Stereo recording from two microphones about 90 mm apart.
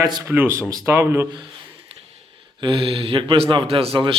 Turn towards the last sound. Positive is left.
turn(degrees=-90)